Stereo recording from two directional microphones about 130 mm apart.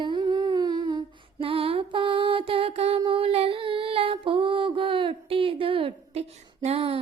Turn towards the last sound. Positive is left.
turn(degrees=-50)  # may be behind; listen again after turning